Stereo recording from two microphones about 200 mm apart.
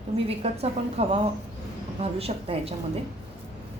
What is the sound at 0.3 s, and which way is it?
A woman's voice, 30° right (ahead or behind).